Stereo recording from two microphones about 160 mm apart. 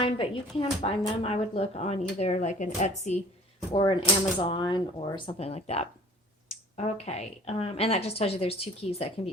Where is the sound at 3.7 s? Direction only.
30° left (ahead or behind).